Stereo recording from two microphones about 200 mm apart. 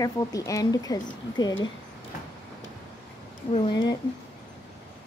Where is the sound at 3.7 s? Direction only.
20° left (ahead or behind).